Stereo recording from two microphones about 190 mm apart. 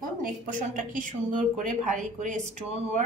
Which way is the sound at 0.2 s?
45° right (ahead or behind).